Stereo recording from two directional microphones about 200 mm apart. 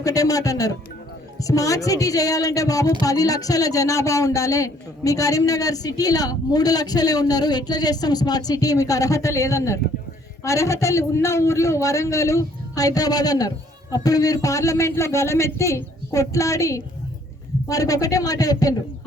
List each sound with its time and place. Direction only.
0.0 s a woman's voice: 15° left (ahead or behind)